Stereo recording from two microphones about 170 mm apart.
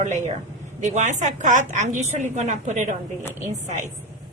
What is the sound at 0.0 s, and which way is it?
A woman's voice, 45° right (ahead or behind).